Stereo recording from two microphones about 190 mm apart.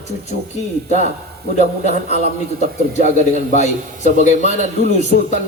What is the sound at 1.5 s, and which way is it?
Speech, 35° left (ahead or behind).